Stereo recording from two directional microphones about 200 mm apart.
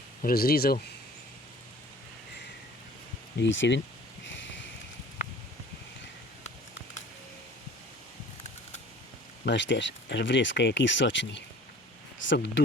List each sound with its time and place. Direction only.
0.2 s speech: 45° left (ahead or behind)
3.3 s speech: 65° left (ahead or behind)
4.3 s sniff: 65° left (ahead or behind)
9.4 s speech: 60° left (ahead or behind)